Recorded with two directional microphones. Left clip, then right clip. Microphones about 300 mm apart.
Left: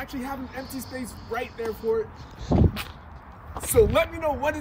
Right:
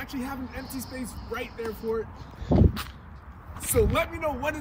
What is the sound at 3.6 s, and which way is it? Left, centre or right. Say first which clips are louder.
Speech: left 5 dB; centre.